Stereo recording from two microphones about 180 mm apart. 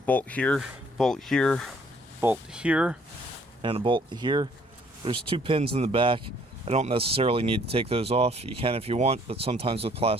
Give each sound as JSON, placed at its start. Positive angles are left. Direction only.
{"t": 0.0, "sound": "speech", "side_deg": 10}
{"t": 2.2, "sound": "speech", "side_deg": -5}
{"t": 3.6, "sound": "speech", "side_deg": -30}